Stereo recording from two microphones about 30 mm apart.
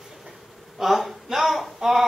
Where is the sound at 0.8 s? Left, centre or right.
Centre.